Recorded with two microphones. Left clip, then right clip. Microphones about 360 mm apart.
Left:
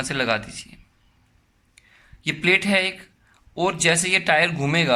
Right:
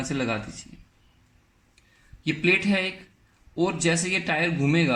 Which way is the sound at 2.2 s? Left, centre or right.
Centre.